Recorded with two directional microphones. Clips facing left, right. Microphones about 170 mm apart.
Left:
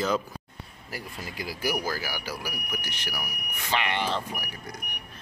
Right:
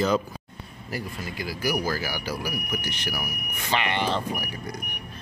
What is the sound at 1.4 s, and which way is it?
Speech, 25° left (ahead or behind).